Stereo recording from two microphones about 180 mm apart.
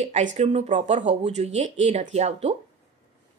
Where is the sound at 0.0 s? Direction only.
40° right (ahead or behind).